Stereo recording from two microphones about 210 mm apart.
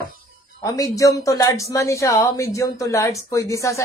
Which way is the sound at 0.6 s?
15° left (ahead or behind).